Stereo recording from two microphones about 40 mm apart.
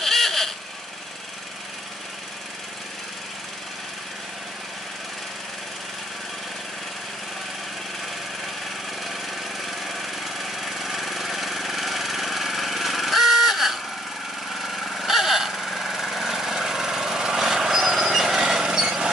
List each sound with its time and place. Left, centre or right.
0.0 s vehicle: centre
9.7 s lawn mower: centre